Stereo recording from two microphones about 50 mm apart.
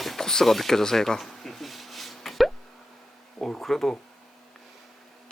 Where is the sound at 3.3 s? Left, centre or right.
Centre.